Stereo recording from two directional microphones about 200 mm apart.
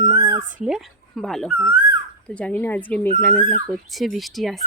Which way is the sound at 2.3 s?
5° left (ahead or behind).